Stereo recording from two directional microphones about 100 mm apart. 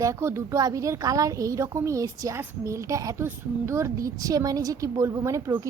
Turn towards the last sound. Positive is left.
turn(degrees=-35)  # may be behind; listen again after turning